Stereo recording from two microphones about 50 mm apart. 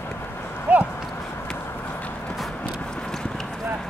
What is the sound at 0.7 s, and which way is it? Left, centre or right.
Clip-clop, right.